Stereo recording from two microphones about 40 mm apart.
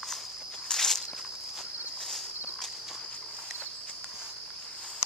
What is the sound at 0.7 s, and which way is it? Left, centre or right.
Walk, centre.